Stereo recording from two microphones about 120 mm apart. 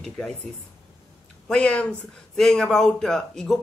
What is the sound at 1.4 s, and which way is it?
A man's voice, 10° left (ahead or behind).